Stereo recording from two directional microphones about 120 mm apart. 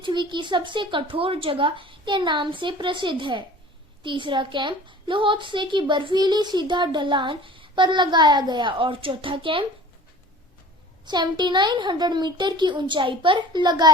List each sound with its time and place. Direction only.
0.0 s a woman's voice: 40° right (ahead or behind)
11.0 s a woman's voice: 35° right (ahead or behind)